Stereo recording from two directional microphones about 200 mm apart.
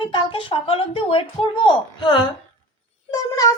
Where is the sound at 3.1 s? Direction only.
15° left (ahead or behind).